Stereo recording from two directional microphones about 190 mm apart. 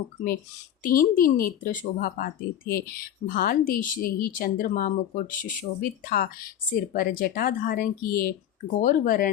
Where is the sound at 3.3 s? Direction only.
45° left (ahead or behind).